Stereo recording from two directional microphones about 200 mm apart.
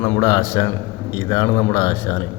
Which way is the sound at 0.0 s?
15° left (ahead or behind).